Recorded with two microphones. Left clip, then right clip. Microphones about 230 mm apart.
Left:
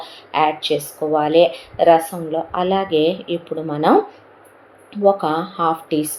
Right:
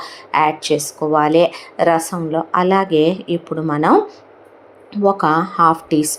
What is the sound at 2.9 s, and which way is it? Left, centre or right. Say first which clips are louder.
Speech: right 2 dB; right.